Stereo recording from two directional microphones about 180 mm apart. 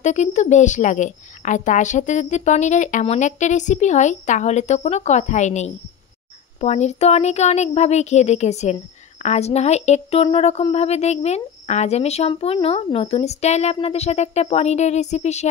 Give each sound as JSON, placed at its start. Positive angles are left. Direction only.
{"t": 0.0, "sound": "a woman's voice", "side_deg": 40}